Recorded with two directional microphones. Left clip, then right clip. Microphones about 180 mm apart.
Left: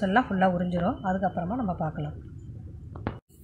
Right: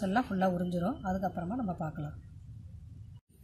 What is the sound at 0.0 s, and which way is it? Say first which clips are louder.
Speech: left 7 dB; 25° right (ahead or behind).